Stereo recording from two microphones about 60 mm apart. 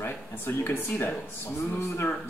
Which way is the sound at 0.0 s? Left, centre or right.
Left.